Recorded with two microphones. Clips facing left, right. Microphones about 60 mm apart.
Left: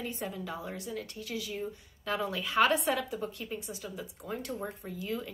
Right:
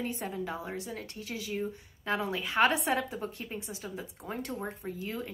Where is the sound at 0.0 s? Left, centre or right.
Right.